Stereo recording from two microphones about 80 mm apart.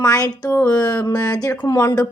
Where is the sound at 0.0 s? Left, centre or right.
Left.